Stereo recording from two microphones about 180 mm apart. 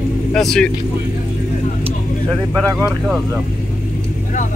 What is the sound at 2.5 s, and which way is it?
Speech, centre (ahead or behind).